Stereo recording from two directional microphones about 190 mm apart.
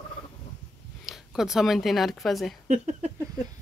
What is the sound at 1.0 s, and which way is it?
Speech, centre (ahead or behind).